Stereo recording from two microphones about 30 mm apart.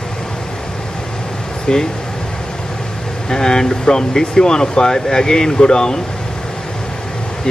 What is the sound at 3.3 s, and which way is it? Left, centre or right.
Speech, left.